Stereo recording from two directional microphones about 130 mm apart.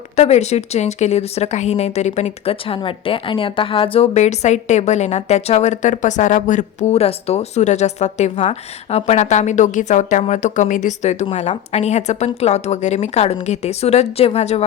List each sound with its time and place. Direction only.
0.2 s a woman's voice: 55° left (ahead or behind)